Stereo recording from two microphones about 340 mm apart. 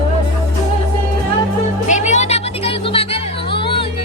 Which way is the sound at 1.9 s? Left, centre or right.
Left.